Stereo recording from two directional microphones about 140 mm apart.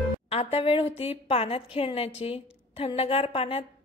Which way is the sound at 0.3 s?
45° left (ahead or behind).